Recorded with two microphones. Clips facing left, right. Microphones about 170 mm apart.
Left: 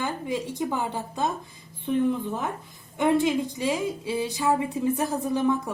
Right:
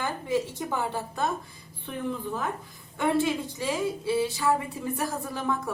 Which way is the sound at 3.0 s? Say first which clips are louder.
Left 3 dB; 20° left (ahead or behind).